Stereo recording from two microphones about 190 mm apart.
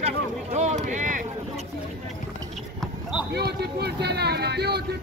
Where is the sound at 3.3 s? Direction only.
60° right (ahead or behind).